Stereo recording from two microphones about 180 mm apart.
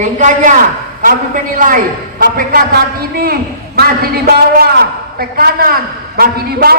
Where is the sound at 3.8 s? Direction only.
60° right (ahead or behind).